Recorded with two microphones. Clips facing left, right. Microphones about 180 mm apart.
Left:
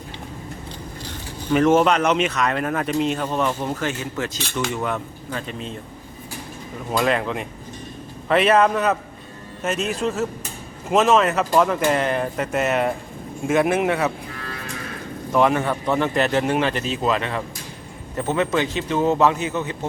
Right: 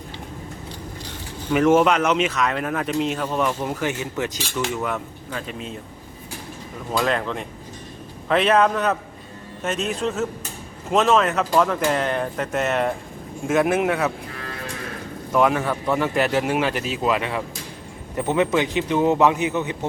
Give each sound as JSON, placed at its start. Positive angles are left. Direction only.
{"t": 1.5, "sound": "speech", "side_deg": -5}
{"t": 4.5, "sound": "speech", "side_deg": -5}
{"t": 6.9, "sound": "speech", "side_deg": 5}
{"t": 15.3, "sound": "speech", "side_deg": 0}